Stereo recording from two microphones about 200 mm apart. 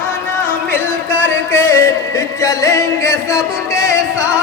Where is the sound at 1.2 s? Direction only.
10° left (ahead or behind).